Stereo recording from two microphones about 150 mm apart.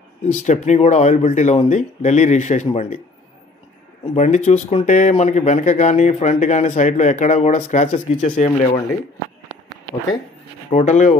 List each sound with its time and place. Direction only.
0.3 s speech: 55° left (ahead or behind)
4.0 s speech: 50° left (ahead or behind)
10.7 s speech: 50° left (ahead or behind)